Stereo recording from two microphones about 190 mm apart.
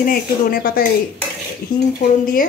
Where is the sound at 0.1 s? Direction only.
50° left (ahead or behind).